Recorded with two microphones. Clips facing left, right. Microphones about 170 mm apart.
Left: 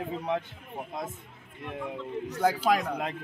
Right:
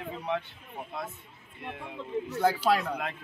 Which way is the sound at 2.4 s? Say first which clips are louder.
Left 1 dB; 15° left (ahead or behind).